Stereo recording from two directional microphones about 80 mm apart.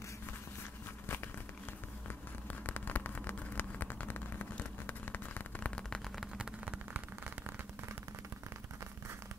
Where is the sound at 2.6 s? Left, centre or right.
Left.